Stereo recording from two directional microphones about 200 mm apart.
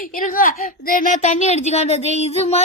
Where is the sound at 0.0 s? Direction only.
45° left (ahead or behind).